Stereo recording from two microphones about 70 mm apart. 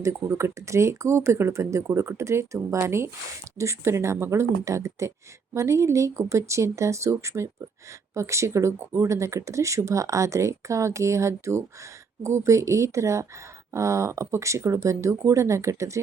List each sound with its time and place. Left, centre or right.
0.0 s speech: right